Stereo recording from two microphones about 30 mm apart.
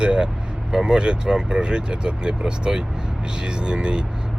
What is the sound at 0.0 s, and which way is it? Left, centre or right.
Speech, right.